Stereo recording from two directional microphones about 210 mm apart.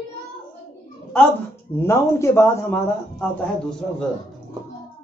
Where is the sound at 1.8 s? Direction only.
10° left (ahead or behind).